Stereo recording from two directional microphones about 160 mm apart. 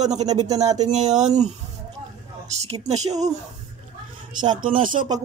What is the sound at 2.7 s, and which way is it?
Speech, 45° right (ahead or behind).